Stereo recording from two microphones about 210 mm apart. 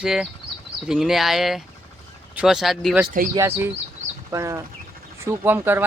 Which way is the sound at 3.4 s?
10° right (ahead or behind).